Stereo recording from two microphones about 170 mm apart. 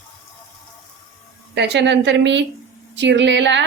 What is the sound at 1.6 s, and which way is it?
A woman's voice, 85° right.